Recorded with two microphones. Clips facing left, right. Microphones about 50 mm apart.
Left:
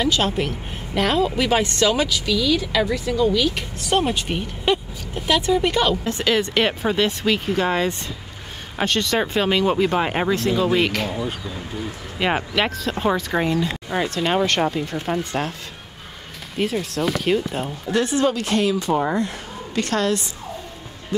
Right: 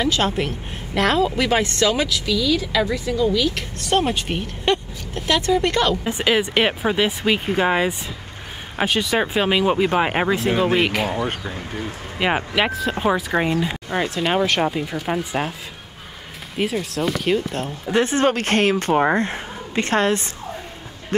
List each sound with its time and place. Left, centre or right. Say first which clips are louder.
0.0 s speech: even; centre
6.0 s speech: right 1 dB; centre
11.2 s speech: right 2 dB; right
12.2 s speech: right 1 dB; centre
13.8 s speech: right 1 dB; centre
16.5 s speech: even; centre
17.9 s speech: right 2 dB; right
19.3 s a woman's voice: right 1 dB; right